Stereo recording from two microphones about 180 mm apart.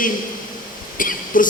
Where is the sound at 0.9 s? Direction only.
50° left (ahead or behind).